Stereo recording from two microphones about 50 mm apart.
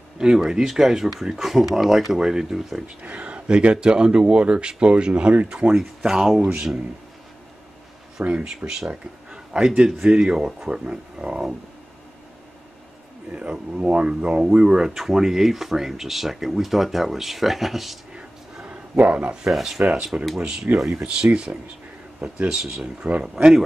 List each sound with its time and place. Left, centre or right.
0.2 s speech: centre
3.0 s speech: right
5.8 s speech: centre
8.2 s speech: centre
13.5 s speech: right; by 17.9 s centre
18.1 s a sound: right
19.5 s speech: centre
20.9 s speech: right
22.5 s speech: centre